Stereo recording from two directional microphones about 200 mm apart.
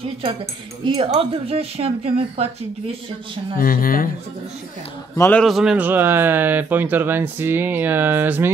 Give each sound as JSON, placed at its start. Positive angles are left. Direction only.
{"t": 0.8, "sound": "speech", "side_deg": -30}
{"t": 3.5, "sound": "speech", "side_deg": 45}
{"t": 5.1, "sound": "speech", "side_deg": 15}
{"t": 5.4, "sound": "speech", "side_deg": 0}